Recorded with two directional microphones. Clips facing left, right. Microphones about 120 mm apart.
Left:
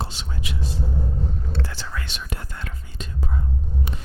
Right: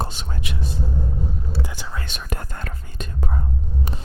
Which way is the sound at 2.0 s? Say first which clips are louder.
Right 3 dB; 50° right (ahead or behind).